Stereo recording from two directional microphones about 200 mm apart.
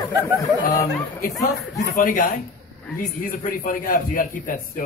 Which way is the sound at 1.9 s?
40° left (ahead or behind).